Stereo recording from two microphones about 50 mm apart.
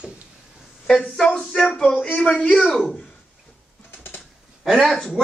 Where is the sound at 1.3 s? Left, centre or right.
Centre.